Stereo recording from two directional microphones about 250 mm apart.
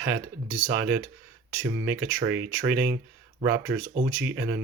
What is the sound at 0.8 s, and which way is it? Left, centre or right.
Speech, centre.